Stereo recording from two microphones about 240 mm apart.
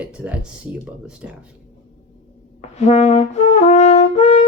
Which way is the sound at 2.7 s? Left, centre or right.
Left.